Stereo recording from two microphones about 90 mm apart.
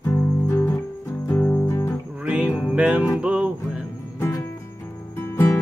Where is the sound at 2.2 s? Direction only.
15° right (ahead or behind).